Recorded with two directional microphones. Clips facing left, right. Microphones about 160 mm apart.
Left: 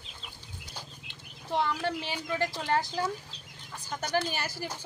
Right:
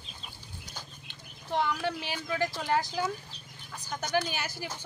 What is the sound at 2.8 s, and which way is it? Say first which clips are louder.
Speech: even; 30° left (ahead or behind).